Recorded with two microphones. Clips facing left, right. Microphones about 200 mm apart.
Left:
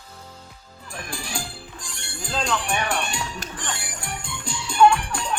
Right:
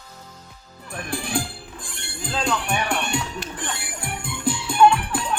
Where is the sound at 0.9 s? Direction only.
55° right (ahead or behind).